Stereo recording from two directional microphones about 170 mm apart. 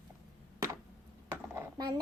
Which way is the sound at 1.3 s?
15° right (ahead or behind).